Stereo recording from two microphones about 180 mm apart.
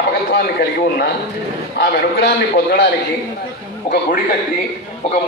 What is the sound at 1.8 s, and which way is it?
A man's voice, 60° left (ahead or behind).